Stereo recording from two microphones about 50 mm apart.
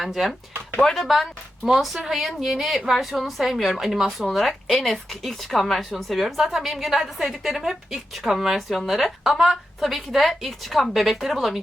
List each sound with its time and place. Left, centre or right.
0.0 s a woman's voice: centre
0.8 s a woman's voice: centre